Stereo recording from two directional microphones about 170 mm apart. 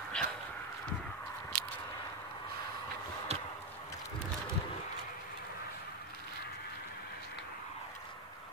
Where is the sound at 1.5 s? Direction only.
60° right (ahead or behind).